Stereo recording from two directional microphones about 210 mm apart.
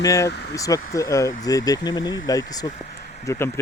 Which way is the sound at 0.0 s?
15° left (ahead or behind).